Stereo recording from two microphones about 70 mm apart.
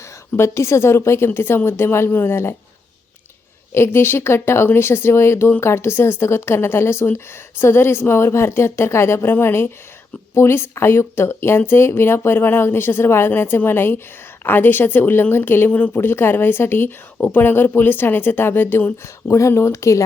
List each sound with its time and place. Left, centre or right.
0.3 s speech: left
3.8 s speech: left
19.3 s speech: left